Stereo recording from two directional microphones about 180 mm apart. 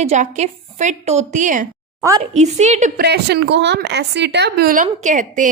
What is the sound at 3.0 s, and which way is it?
A woman's voice, 65° right (ahead or behind).